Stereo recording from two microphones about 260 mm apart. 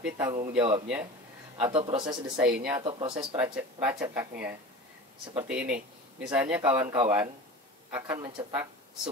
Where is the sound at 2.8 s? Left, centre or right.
Right.